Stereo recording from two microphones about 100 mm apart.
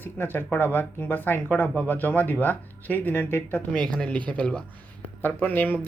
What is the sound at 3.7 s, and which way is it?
Speech, 10° left (ahead or behind).